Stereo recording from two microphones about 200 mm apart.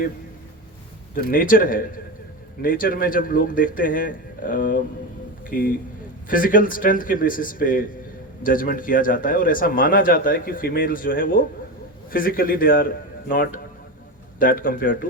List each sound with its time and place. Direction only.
1.3 s a man's voice: 45° left (ahead or behind)